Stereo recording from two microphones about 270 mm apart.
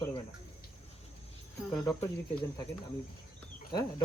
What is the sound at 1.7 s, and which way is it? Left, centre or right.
Speech, centre.